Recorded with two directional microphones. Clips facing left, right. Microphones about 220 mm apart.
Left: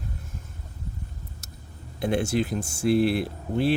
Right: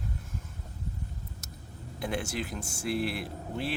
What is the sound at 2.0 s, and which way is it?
Speech, 25° left (ahead or behind).